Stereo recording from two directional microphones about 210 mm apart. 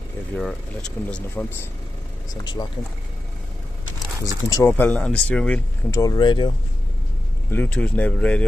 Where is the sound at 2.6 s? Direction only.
15° left (ahead or behind).